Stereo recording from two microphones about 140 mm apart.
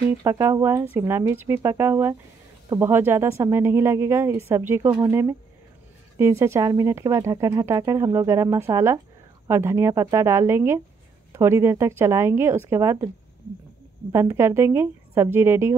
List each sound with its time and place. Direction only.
0.2 s a woman's voice: 25° right (ahead or behind)
6.1 s speech: 20° right (ahead or behind)
14.1 s a woman's voice: 20° right (ahead or behind)